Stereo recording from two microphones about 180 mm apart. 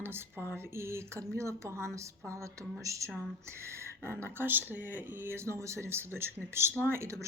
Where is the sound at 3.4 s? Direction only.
15° right (ahead or behind).